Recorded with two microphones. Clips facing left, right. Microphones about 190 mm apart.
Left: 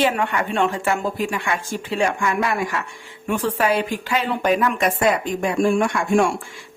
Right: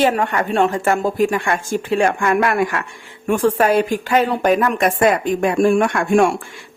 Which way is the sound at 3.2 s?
45° right (ahead or behind).